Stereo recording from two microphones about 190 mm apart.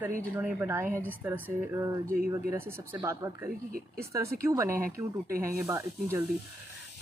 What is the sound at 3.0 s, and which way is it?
Speech, 20° right (ahead or behind).